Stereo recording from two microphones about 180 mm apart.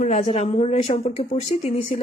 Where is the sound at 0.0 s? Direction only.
40° left (ahead or behind).